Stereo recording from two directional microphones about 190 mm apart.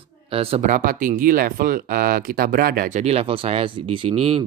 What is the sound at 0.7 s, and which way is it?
Speech, 45° right (ahead or behind).